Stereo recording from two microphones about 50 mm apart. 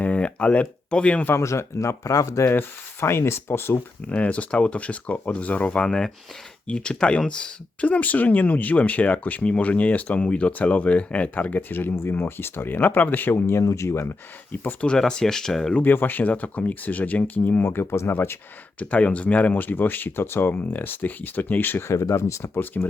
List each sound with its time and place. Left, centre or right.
0.0 s a sound: left
1.4 s speech: left
3.0 s speech: left
4.1 s speech: left
7.9 s speech: left
11.9 s speech: left
13.5 s speech: left
14.8 s speech: centre
15.8 s speech: left
17.7 s speech: left
18.8 s speech: left
21.8 s speech: left
22.5 s speech: left